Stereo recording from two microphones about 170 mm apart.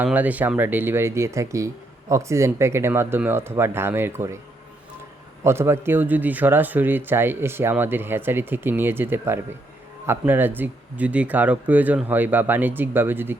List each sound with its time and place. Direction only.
0.0 s speech: 10° right (ahead or behind)
5.4 s speech: 15° right (ahead or behind)